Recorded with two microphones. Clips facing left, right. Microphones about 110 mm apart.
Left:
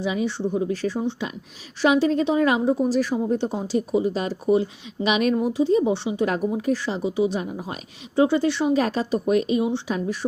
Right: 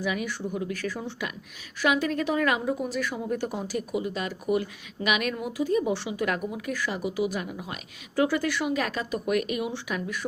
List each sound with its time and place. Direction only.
0.0 s a woman's voice: 25° left (ahead or behind)